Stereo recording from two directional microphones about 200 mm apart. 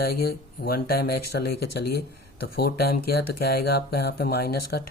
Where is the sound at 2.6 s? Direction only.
50° left (ahead or behind).